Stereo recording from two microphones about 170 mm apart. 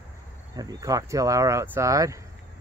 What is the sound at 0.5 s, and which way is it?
Speech, 20° right (ahead or behind).